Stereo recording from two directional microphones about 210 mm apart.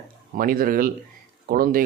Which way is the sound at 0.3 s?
45° right (ahead or behind).